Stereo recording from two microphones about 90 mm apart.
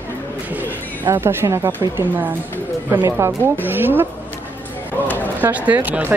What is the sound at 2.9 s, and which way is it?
Speech, 20° right (ahead or behind).